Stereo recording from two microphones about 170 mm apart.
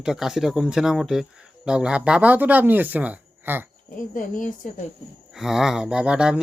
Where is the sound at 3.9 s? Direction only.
50° left (ahead or behind).